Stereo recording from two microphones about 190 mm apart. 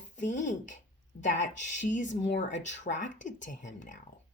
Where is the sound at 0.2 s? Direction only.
40° left (ahead or behind).